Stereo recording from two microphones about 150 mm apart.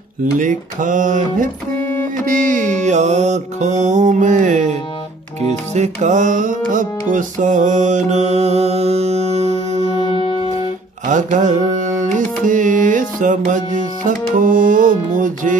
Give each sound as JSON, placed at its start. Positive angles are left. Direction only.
{"t": 0.2, "sound": "music", "side_deg": -60}
{"t": 5.8, "sound": "music", "side_deg": -50}
{"t": 9.9, "sound": "music", "side_deg": 35}
{"t": 11.1, "sound": "carnatic music", "side_deg": -55}